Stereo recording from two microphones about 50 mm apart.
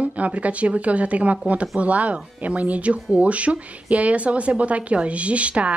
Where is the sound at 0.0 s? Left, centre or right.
Right.